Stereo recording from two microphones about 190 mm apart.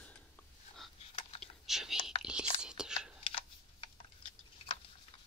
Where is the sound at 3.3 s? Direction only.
30° left (ahead or behind).